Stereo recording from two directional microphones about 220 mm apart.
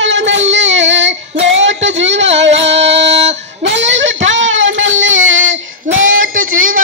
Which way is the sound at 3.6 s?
55° right (ahead or behind).